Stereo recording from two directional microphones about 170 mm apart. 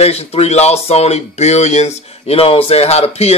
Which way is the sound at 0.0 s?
35° left (ahead or behind).